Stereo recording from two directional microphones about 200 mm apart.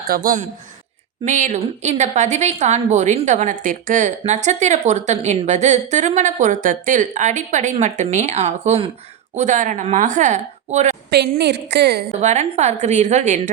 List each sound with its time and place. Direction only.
0.1 s a woman's voice: 45° right (ahead or behind)
11.1 s a woman's voice: 55° right (ahead or behind)
12.2 s a woman's voice: 35° right (ahead or behind)